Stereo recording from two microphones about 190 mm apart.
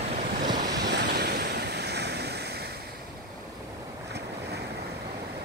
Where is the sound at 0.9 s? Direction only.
60° right (ahead or behind).